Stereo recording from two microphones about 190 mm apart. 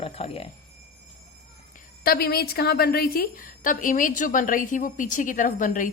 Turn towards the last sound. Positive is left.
turn(degrees=45)  # may be behind; listen again after turning